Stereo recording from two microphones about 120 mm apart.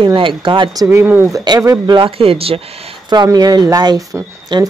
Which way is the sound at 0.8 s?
15° right (ahead or behind).